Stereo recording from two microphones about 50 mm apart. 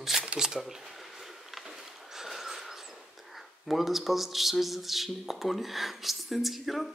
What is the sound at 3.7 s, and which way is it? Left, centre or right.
Speech, centre.